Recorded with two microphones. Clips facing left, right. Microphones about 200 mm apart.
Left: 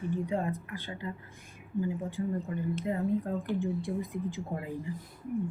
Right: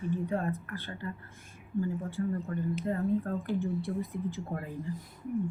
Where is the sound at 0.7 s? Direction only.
15° left (ahead or behind).